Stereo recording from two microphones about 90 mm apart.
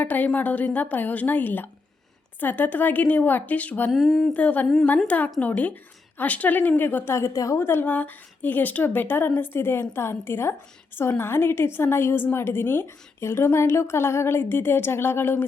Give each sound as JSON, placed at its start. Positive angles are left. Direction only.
{"t": 0.0, "sound": "a woman's voice", "side_deg": 20}
{"t": 3.9, "sound": "speech", "side_deg": 0}
{"t": 4.4, "sound": "humming", "side_deg": 15}
{"t": 6.1, "sound": "a woman's voice", "side_deg": 15}
{"t": 7.6, "sound": "a woman's voice", "side_deg": 25}